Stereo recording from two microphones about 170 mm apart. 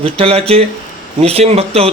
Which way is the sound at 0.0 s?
35° right (ahead or behind).